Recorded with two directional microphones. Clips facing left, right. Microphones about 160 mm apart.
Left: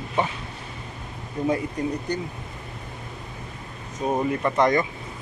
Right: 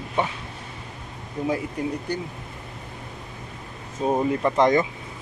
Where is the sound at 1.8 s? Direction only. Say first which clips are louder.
Left 1 dB; 5° right (ahead or behind).